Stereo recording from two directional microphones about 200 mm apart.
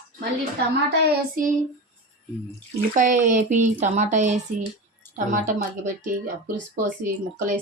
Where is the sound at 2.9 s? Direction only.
40° right (ahead or behind).